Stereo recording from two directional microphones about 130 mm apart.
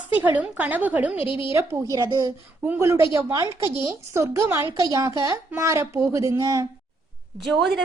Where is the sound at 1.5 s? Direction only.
20° right (ahead or behind).